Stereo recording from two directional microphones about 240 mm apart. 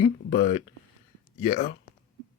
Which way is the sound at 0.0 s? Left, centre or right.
Left.